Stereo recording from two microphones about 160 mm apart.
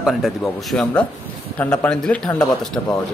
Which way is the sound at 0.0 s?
Centre (ahead or behind).